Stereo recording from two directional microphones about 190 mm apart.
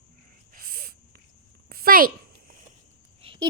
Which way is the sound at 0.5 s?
50° right (ahead or behind).